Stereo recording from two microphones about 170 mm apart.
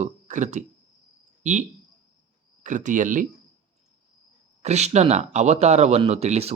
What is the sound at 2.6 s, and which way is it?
Speech, 45° right (ahead or behind).